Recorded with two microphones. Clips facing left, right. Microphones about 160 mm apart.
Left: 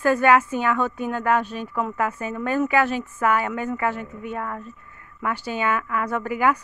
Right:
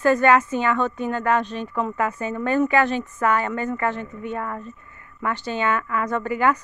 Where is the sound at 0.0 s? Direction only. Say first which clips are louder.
Right 1 dB; 5° left (ahead or behind).